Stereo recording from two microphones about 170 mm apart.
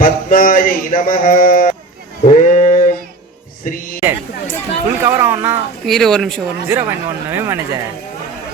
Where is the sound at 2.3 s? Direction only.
45° left (ahead or behind).